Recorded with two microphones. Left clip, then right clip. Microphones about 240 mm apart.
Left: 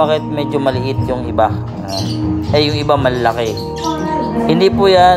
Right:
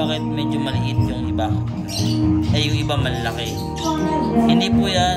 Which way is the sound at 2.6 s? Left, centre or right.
Left.